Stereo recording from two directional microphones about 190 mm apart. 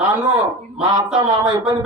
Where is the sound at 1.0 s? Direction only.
5° right (ahead or behind).